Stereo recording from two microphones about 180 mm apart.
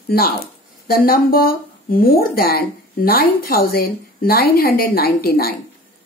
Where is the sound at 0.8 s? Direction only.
55° left (ahead or behind).